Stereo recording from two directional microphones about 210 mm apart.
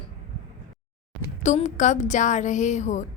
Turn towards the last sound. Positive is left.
turn(degrees=35)  # may be behind; listen again after turning